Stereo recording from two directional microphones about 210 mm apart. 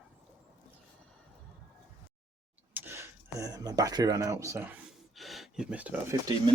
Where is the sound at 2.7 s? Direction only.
10° right (ahead or behind).